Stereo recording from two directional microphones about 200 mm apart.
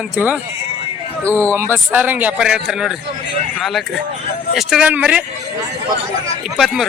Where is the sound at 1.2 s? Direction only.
5° left (ahead or behind).